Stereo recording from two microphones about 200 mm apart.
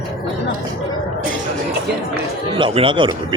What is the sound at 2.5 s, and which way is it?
Speech, 25° right (ahead or behind).